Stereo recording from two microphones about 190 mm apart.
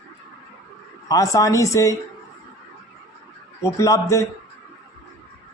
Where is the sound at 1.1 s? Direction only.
15° left (ahead or behind).